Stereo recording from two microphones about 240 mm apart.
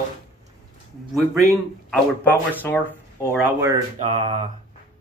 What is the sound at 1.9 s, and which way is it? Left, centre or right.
Speech, centre.